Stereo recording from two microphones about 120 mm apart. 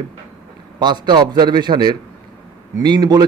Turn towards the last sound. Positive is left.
turn(degrees=-35)  # may be behind; listen again after turning